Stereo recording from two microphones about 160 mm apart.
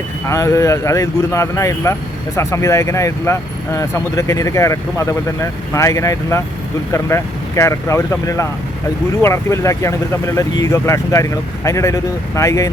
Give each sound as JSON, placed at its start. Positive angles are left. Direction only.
{"t": 0.3, "sound": "speech", "side_deg": 20}